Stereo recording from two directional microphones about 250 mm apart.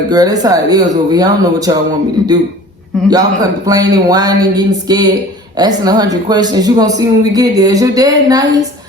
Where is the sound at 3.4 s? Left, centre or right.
Centre.